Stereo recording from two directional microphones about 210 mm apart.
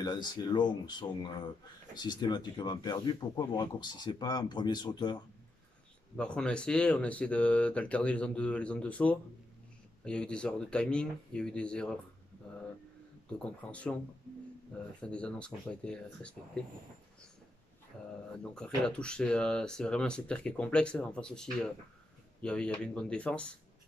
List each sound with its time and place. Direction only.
0.0 s speech: 20° left (ahead or behind)
6.1 s speech: 5° left (ahead or behind)
13.4 s speech: 5° left (ahead or behind)
15.0 s speech: 5° left (ahead or behind)
18.9 s speech: 5° left (ahead or behind)